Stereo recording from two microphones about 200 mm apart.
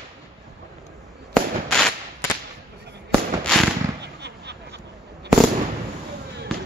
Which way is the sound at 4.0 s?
55° right (ahead or behind).